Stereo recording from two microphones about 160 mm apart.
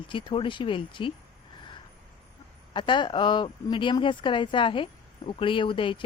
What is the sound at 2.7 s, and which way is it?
Speech, 30° left (ahead or behind).